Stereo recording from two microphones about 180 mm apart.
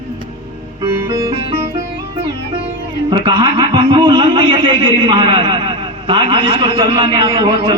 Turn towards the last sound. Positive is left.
turn(degrees=-30)  # may be behind; listen again after turning